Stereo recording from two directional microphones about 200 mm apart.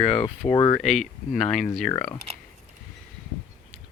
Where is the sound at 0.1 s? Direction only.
35° left (ahead or behind).